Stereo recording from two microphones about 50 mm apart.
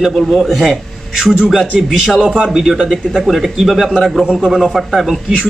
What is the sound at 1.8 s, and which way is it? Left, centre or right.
Speech, centre.